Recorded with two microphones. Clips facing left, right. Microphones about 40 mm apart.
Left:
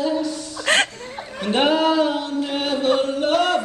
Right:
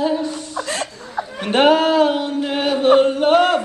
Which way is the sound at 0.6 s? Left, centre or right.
Left.